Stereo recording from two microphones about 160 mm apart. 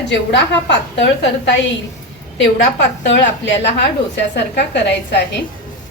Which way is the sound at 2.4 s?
90° left.